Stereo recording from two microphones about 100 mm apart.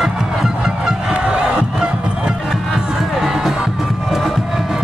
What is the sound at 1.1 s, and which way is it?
Crowd, 10° right (ahead or behind).